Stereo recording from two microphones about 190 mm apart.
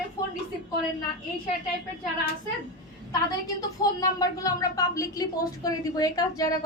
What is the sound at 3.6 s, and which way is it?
A woman's voice, 20° left (ahead or behind).